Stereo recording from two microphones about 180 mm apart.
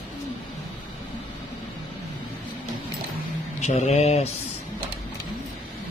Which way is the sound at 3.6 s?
40° left (ahead or behind).